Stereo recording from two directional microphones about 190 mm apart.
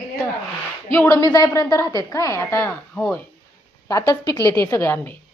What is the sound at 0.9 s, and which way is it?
A woman's voice, 15° left (ahead or behind).